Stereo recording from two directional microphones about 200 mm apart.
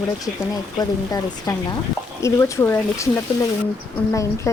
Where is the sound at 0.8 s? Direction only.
20° left (ahead or behind).